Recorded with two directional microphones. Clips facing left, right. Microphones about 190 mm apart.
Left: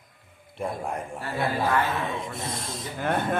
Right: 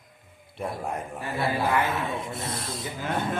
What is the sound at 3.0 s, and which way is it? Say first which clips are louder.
Speech: left 4 dB; 55° left (ahead or behind).